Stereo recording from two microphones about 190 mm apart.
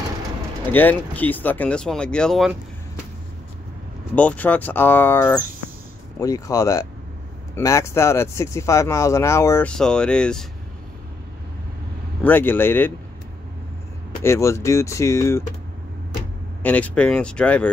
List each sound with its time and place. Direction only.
0.7 s speech: 10° left (ahead or behind)
4.1 s speech: 5° left (ahead or behind)
12.2 s speech: 10° left (ahead or behind)
14.2 s speech: 15° left (ahead or behind)
16.6 s speech: 10° left (ahead or behind)